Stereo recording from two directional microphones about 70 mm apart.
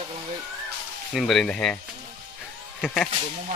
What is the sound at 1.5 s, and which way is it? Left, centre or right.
Speech, centre.